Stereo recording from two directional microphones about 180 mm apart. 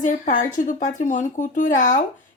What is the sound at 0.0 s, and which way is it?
A child's voice, 45° left (ahead or behind).